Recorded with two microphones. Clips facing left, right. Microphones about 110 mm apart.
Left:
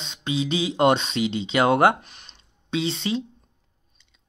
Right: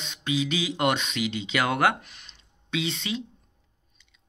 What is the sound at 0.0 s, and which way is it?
Speech, 25° left (ahead or behind).